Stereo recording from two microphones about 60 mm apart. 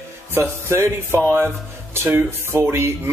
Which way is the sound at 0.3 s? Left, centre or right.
Right.